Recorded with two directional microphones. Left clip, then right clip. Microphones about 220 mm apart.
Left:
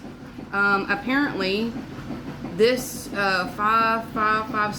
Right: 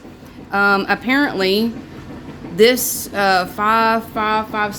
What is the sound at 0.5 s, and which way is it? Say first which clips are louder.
A woman's voice: right 6 dB; 50° right (ahead or behind).